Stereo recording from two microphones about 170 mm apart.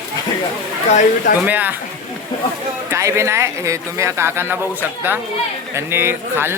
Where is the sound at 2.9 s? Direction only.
15° right (ahead or behind).